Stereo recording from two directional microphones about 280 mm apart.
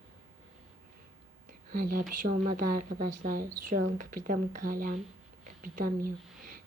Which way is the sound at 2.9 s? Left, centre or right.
Right.